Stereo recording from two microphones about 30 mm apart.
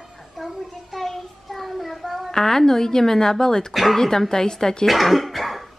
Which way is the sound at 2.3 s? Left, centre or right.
Centre.